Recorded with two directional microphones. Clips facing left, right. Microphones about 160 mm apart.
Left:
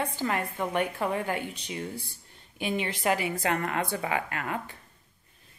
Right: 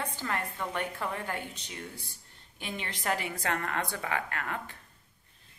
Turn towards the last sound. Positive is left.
turn(degrees=10)  # may be behind; listen again after turning